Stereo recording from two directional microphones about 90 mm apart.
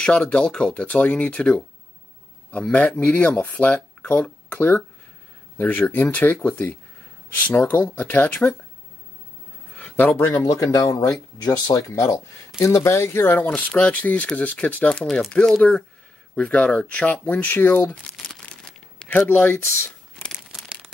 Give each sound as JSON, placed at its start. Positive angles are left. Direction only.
{"t": 0.0, "sound": "speech", "side_deg": 15}
{"t": 2.6, "sound": "speech", "side_deg": 15}
{"t": 9.8, "sound": "a sound", "side_deg": 15}
{"t": 10.1, "sound": "speech", "side_deg": 30}
{"t": 16.3, "sound": "speech", "side_deg": 15}
{"t": 20.6, "sound": "crumpling", "side_deg": -5}